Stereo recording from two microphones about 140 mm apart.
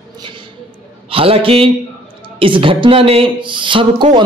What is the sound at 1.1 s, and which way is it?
A man's voice, 40° right (ahead or behind).